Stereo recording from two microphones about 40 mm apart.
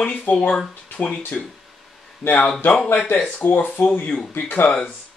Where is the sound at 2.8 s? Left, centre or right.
Left.